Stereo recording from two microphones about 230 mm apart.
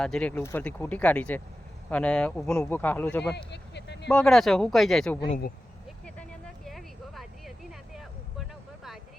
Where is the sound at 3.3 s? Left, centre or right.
Left.